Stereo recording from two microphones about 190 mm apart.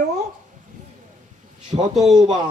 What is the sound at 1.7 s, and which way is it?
Speech, 30° right (ahead or behind).